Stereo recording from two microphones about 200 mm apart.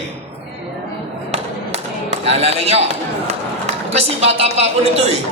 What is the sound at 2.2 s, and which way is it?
Speech, 30° right (ahead or behind).